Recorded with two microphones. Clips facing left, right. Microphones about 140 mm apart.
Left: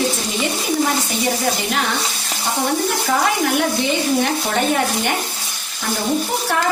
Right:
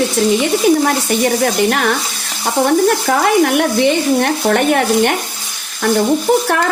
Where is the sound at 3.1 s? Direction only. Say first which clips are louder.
Right 6 dB; 65° right (ahead or behind).